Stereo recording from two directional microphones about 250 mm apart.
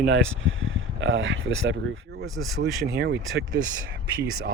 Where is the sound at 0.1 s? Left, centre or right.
Right.